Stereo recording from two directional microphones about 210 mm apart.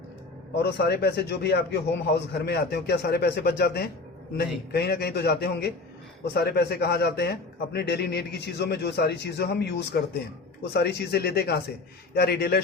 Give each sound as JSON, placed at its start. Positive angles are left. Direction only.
{"t": 0.6, "sound": "a man's voice", "side_deg": 50}